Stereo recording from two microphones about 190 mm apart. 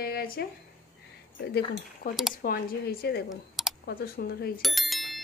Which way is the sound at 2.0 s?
50° left (ahead or behind).